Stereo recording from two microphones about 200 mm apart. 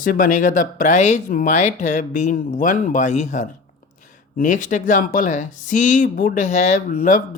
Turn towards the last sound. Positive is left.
turn(degrees=40)  # may be behind; listen again after turning